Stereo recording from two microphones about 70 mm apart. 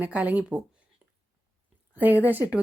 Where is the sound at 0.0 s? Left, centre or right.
Right.